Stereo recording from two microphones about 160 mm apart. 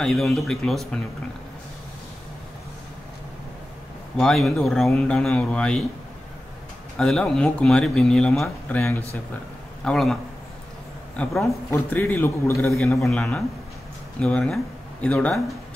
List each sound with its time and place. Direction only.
0.0 s speech: centre (ahead or behind)
4.2 s speech: centre (ahead or behind)
7.0 s speech: 5° left (ahead or behind)
11.4 s a man's voice: 15° left (ahead or behind)
12.7 s speech: 5° left (ahead or behind)